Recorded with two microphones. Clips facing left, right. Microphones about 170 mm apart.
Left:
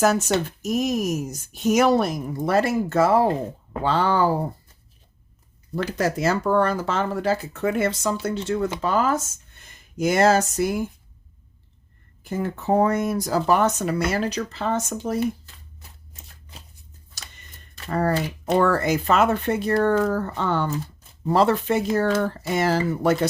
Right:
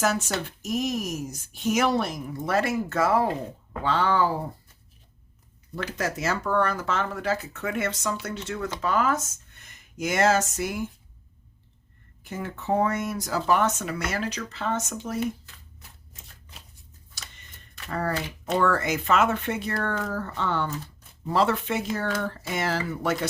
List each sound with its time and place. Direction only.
0.0 s speech: 40° left (ahead or behind)
5.7 s speech: 35° left (ahead or behind)
12.2 s speech: 35° left (ahead or behind)
17.7 s speech: 35° left (ahead or behind)